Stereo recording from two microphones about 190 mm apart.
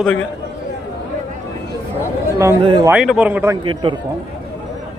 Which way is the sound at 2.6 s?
25° right (ahead or behind).